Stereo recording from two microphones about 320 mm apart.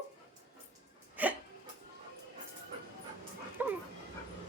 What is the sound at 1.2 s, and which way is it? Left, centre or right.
Hiccup, centre.